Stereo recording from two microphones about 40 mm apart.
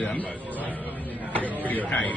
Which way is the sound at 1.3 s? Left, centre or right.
Left.